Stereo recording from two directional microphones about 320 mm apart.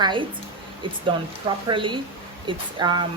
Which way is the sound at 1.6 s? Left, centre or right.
Centre.